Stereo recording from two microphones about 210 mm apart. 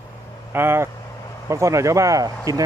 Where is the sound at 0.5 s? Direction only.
10° right (ahead or behind).